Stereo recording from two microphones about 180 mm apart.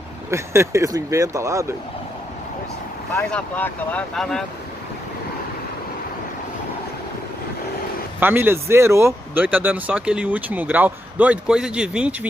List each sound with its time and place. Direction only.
0.3 s speech: 15° right (ahead or behind)
3.2 s speech: 5° left (ahead or behind)
8.2 s speech: 10° right (ahead or behind)